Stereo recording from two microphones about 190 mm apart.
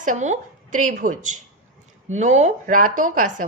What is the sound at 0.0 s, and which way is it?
A woman's voice, 40° right (ahead or behind).